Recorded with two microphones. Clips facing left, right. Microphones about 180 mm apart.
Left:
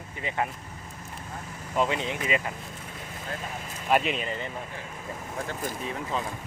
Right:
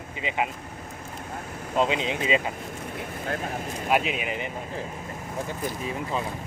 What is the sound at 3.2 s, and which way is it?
Speech, 55° right (ahead or behind).